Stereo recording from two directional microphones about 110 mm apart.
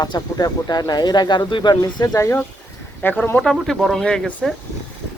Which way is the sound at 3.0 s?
15° left (ahead or behind).